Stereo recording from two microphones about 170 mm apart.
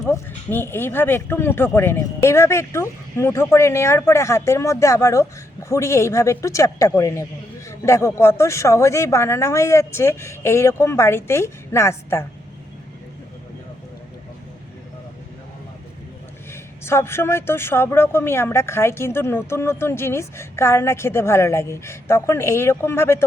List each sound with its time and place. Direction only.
0.1 s speech: 15° left (ahead or behind)
16.5 s speech: 15° left (ahead or behind)